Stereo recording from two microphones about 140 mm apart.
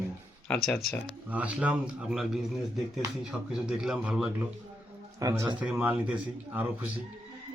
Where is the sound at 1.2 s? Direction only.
10° right (ahead or behind).